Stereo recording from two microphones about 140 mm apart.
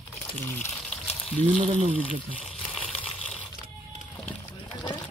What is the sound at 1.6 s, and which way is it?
Speech, 60° right (ahead or behind).